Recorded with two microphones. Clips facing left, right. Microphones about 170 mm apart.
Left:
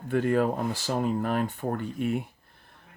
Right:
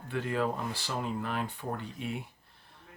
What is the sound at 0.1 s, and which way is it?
Speech, 50° left (ahead or behind).